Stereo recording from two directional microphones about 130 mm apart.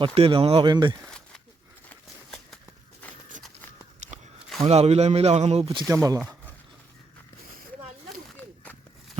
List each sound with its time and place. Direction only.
0.0 s speech: 45° right (ahead or behind)
1.9 s a sound: 5° left (ahead or behind)
4.6 s speech: 50° right (ahead or behind)
5.9 s speech: 25° right (ahead or behind)